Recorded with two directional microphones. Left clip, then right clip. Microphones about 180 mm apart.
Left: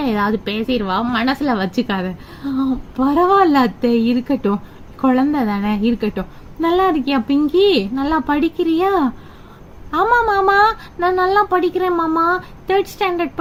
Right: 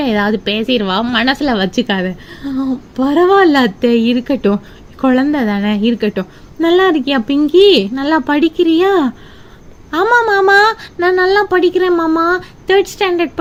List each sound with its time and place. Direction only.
0.0 s a woman's voice: 35° right (ahead or behind)